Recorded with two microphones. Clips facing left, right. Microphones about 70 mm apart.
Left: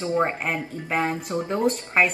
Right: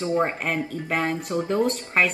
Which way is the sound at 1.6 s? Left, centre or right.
Centre.